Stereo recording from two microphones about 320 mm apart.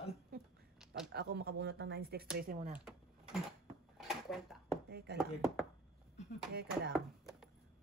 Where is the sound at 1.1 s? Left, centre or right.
Right.